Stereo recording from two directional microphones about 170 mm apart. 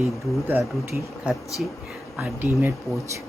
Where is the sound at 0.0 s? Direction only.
10° right (ahead or behind).